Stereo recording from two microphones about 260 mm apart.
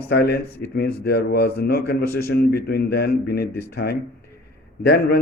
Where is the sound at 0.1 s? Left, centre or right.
Left.